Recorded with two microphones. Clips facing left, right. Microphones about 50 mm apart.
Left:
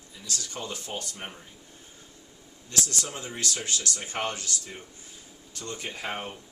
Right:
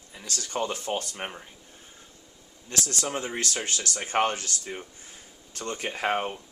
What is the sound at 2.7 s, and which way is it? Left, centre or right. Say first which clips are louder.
Speech: right 2 dB; right.